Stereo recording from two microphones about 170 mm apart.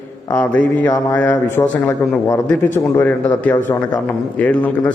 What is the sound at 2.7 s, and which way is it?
Speech, 10° left (ahead or behind).